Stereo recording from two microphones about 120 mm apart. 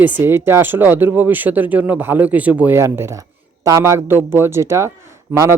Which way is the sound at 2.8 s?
20° right (ahead or behind).